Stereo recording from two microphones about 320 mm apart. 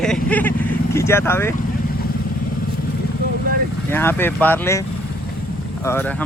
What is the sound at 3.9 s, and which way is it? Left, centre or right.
Speech, centre.